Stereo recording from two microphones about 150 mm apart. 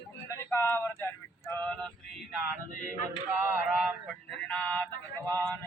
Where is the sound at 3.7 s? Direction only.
Centre (ahead or behind).